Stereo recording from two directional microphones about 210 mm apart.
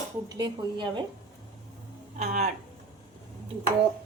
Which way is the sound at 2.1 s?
35° right (ahead or behind).